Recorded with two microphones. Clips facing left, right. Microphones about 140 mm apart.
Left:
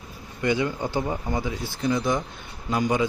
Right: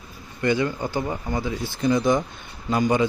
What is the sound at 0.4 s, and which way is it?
Speech, 15° left (ahead or behind).